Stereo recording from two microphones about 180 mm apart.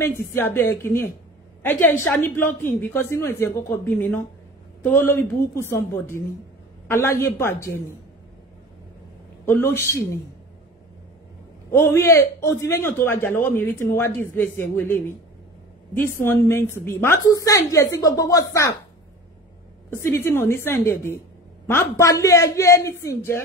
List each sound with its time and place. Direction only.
0.0 s a man's voice: 15° left (ahead or behind)
9.5 s a man's voice: 10° left (ahead or behind)
11.7 s a man's voice: 15° left (ahead or behind)
19.9 s a man's voice: 10° left (ahead or behind)